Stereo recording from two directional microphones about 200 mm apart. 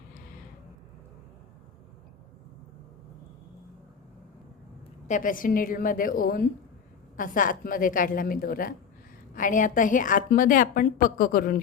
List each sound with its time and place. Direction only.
5.0 s a woman's voice: 40° left (ahead or behind)